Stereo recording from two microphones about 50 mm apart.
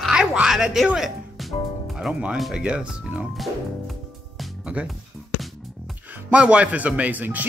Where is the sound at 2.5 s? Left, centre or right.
Right.